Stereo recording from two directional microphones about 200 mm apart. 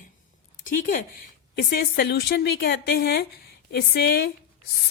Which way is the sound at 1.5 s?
55° left (ahead or behind).